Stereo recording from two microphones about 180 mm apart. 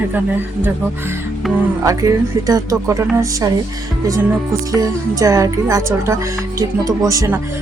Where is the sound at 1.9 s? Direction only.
20° right (ahead or behind).